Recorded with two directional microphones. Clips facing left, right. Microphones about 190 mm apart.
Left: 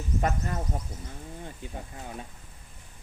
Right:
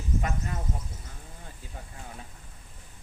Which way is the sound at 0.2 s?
40° left (ahead or behind).